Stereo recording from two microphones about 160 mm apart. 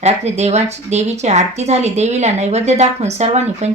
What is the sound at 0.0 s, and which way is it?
A woman's voice, 45° right (ahead or behind).